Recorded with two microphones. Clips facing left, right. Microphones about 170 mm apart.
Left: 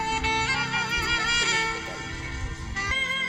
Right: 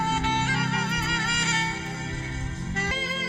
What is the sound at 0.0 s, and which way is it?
Music, 50° right (ahead or behind).